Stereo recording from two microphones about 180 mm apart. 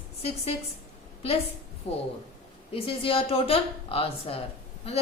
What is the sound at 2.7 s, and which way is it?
A woman's voice, 30° left (ahead or behind).